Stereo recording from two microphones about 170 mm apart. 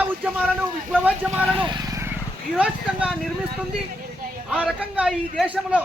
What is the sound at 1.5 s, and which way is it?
Vehicle, 25° right (ahead or behind).